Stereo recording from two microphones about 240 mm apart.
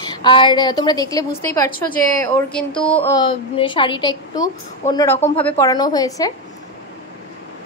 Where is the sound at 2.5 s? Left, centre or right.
Centre.